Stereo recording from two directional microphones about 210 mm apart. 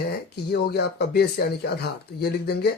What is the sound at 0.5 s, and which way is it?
Speech, 50° left (ahead or behind).